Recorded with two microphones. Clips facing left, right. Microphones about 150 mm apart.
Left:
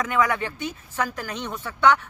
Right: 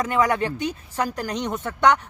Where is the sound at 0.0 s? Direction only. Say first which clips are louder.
Right 2 dB; 35° right (ahead or behind).